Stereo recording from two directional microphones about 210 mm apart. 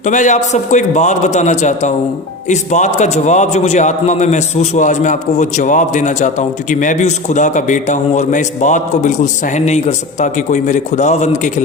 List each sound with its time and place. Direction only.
0.0 s a man's voice: 35° left (ahead or behind)